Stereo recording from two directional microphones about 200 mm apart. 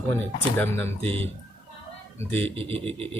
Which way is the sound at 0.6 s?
10° left (ahead or behind).